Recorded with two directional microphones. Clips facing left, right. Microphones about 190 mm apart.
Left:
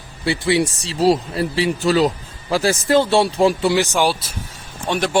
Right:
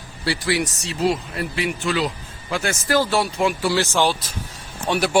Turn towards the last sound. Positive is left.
turn(degrees=-5)  # may be behind; listen again after turning